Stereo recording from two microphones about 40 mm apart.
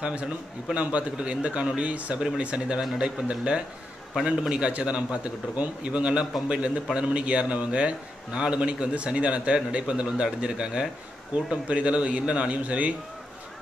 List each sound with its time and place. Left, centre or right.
0.0 s a man's voice: right